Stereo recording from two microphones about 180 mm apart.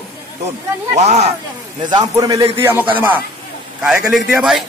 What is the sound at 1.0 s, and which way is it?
Speech, 40° right (ahead or behind).